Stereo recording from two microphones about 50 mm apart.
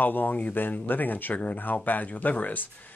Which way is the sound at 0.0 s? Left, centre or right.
Left.